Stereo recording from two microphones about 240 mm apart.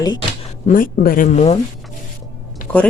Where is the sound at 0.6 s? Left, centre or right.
Left.